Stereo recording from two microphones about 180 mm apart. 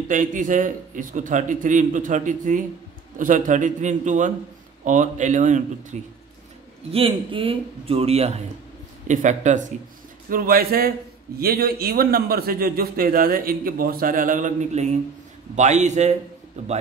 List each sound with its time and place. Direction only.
0.1 s a man's voice: 45° right (ahead or behind)
6.9 s a man's voice: 30° right (ahead or behind)
10.3 s a man's voice: 55° right (ahead or behind)